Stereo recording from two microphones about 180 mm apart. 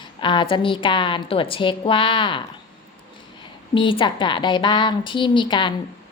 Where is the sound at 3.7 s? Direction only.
30° left (ahead or behind).